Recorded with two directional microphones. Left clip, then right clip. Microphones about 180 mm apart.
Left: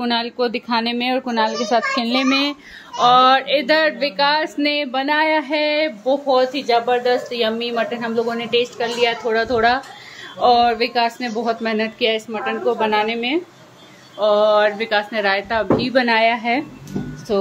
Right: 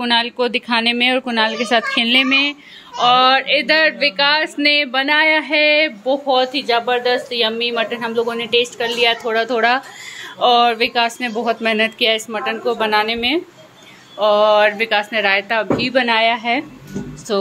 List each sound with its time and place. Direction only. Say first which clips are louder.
0.0 s speech: right 3 dB; centre (ahead or behind)
2.2 s speech: right 3 dB; 25° left (ahead or behind)
3.0 s speech: even; 15° left (ahead or behind)